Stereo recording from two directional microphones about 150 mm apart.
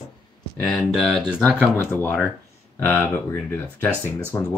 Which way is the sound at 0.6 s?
Centre (ahead or behind).